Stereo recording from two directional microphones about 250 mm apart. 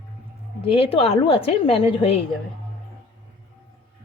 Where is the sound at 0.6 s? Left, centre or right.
Left.